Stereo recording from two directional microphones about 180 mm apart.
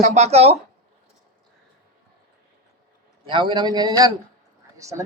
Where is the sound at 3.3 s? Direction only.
25° right (ahead or behind).